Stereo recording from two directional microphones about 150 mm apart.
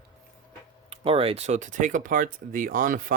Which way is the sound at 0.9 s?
40° right (ahead or behind).